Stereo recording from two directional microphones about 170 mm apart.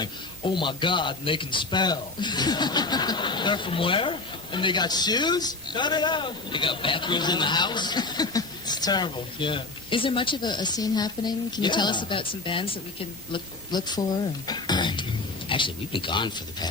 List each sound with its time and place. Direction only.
0.0 s a man's voice: 30° left (ahead or behind)